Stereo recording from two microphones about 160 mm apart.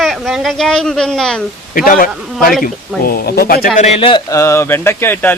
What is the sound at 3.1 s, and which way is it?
Speech, 70° left (ahead or behind).